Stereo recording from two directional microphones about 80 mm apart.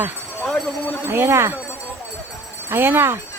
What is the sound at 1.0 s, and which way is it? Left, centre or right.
Speech, right.